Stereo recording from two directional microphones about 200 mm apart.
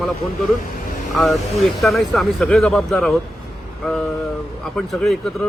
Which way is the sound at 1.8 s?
Centre (ahead or behind).